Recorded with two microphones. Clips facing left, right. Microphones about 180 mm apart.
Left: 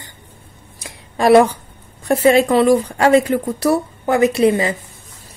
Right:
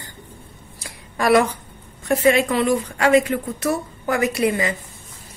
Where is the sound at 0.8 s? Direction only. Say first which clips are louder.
Left 5 dB; 25° left (ahead or behind).